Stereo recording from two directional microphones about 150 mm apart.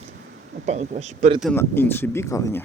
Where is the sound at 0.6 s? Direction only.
50° right (ahead or behind).